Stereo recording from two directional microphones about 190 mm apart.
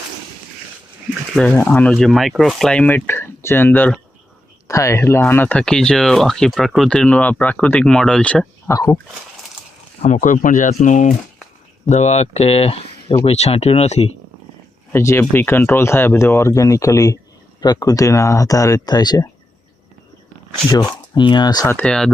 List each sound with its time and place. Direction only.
1.4 s speech: 10° left (ahead or behind)
8.7 s speech: 20° left (ahead or behind)
10.0 s speech: 40° left (ahead or behind)
14.9 s speech: 15° left (ahead or behind)
21.2 s speech: 25° left (ahead or behind)
21.8 s speech: 5° left (ahead or behind)